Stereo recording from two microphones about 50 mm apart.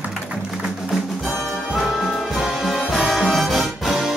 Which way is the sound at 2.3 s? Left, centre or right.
Centre.